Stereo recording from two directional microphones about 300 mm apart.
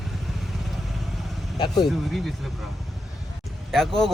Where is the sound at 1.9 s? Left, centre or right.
Centre.